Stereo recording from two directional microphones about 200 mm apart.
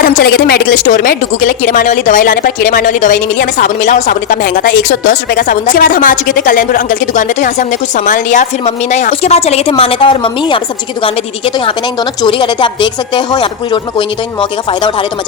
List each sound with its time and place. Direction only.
0.1 s a woman's voice: 45° left (ahead or behind); by 15.0 s 25° left (ahead or behind)